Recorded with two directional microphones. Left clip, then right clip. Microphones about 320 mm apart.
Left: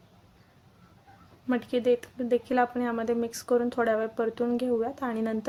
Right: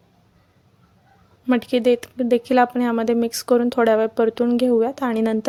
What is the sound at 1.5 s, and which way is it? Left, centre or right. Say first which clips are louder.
Speech: right 7 dB; right.